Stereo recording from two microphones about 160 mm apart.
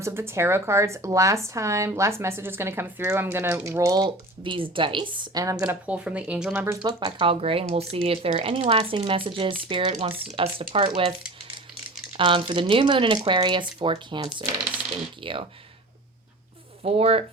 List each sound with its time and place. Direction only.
0.0 s speech: 15° right (ahead or behind)
5.6 s speech: 10° right (ahead or behind)
7.0 s speech: 35° right (ahead or behind)
12.1 s speech: 35° right (ahead or behind)
16.8 s speech: 40° right (ahead or behind)